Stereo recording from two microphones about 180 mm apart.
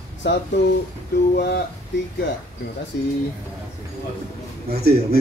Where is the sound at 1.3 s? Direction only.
65° left (ahead or behind).